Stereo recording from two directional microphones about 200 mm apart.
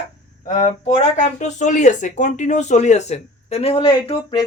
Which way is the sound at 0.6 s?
35° left (ahead or behind).